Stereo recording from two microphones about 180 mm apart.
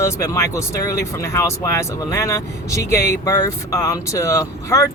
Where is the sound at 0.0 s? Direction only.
15° left (ahead or behind).